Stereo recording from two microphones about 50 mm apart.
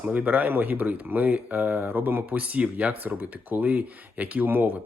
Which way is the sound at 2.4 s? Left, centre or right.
Right.